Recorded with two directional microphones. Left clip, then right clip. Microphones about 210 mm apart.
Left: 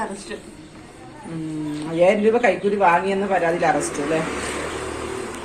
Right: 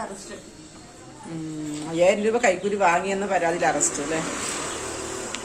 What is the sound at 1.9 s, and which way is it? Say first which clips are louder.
A man's voice: left 3 dB; 5° left (ahead or behind).